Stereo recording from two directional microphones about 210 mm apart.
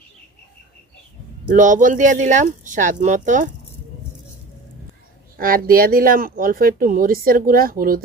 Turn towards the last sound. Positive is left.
turn(degrees=-45)  # may be behind; listen again after turning